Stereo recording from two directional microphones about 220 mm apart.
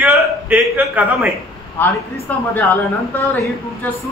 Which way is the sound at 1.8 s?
10° left (ahead or behind).